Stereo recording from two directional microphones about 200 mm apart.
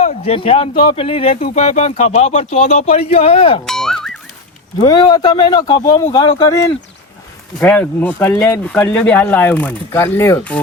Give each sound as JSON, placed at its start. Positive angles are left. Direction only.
{"t": 0.0, "sound": "speech", "side_deg": 30}
{"t": 3.7, "sound": "music", "side_deg": 0}
{"t": 4.8, "sound": "speech", "side_deg": 20}
{"t": 7.6, "sound": "speech", "side_deg": 5}